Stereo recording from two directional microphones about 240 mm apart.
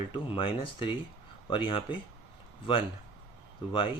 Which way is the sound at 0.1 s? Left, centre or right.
Left.